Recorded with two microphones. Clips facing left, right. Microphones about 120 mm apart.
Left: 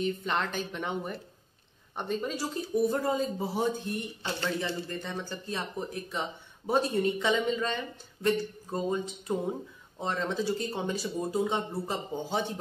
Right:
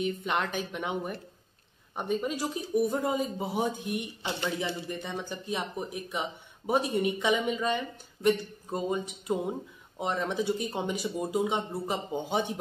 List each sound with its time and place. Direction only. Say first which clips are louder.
0.0 s speech: even; 5° right (ahead or behind)